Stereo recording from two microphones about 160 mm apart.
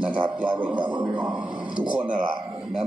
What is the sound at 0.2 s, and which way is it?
Speech, 10° right (ahead or behind).